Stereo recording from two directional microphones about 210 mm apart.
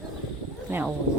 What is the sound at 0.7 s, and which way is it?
Speech, 10° right (ahead or behind).